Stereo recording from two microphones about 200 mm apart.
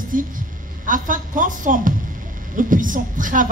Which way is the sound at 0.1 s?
45° right (ahead or behind).